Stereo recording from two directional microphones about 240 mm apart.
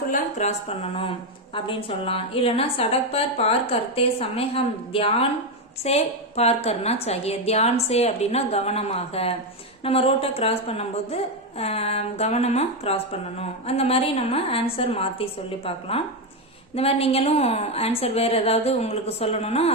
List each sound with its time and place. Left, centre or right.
0.1 s a woman's voice: left